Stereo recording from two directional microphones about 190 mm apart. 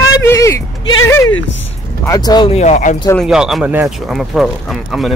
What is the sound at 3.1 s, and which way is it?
Speech, centre (ahead or behind).